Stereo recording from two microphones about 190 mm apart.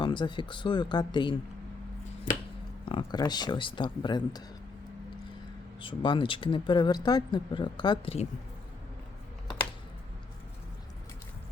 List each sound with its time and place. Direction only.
0.0 s speech: 25° left (ahead or behind)
2.9 s speech: 25° left (ahead or behind)
5.8 s speech: 25° left (ahead or behind)